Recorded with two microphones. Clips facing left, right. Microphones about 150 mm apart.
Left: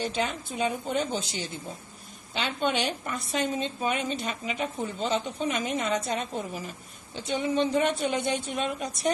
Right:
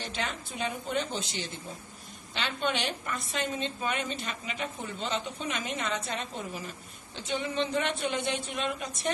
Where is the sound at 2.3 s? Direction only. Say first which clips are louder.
Left 4 dB; 40° left (ahead or behind).